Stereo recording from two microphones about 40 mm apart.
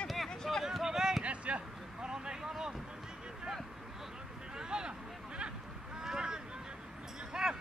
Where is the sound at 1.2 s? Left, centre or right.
Right.